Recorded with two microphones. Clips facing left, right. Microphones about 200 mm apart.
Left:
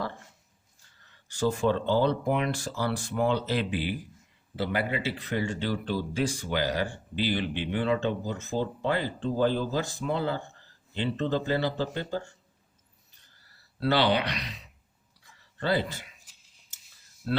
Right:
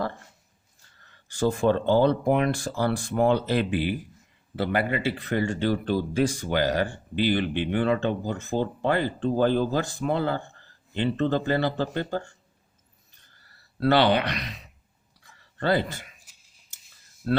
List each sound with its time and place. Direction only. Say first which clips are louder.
1.0 s speech: right 3 dB; 55° right (ahead or behind)
13.7 s speech: right 4 dB; 55° right (ahead or behind)